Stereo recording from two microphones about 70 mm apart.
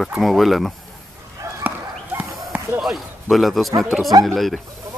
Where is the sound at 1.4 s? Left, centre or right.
Right.